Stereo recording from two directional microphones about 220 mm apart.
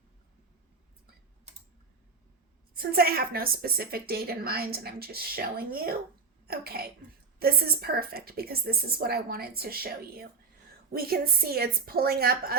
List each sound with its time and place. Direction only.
2.7 s a woman's voice: 45° right (ahead or behind)